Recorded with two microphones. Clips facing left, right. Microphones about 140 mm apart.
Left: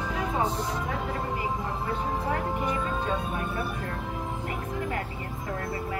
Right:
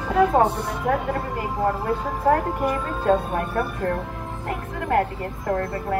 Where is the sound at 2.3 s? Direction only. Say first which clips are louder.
Right 12 dB; 50° right (ahead or behind).